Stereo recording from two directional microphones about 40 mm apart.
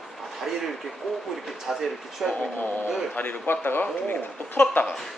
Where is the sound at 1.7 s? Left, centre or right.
Centre.